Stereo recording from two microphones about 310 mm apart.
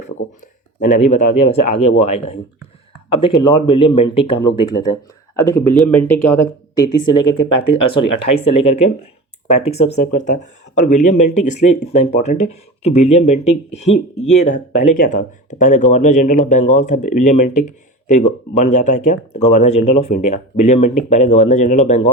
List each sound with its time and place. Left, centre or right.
0.8 s speech: left